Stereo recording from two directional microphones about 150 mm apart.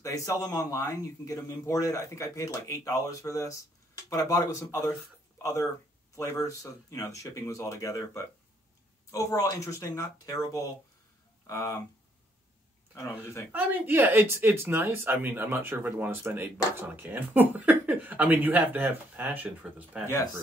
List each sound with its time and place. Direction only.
0.0 s a man's voice: 25° left (ahead or behind)
12.9 s a man's voice: 20° left (ahead or behind)
13.5 s speech: 10° right (ahead or behind)